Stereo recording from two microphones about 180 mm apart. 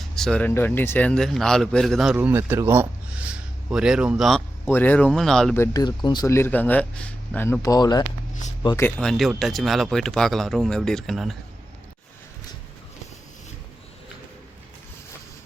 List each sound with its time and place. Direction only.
0.0 s speech: 5° left (ahead or behind)
5.7 s speech: 25° left (ahead or behind)
9.0 s speech: centre (ahead or behind)